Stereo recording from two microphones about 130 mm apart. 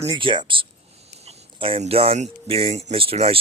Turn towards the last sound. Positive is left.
turn(degrees=-50)  # may be behind; listen again after turning